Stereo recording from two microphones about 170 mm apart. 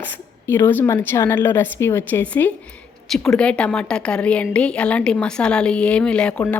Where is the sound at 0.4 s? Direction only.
15° left (ahead or behind).